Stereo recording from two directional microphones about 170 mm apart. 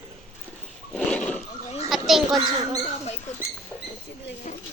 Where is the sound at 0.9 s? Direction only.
5° left (ahead or behind).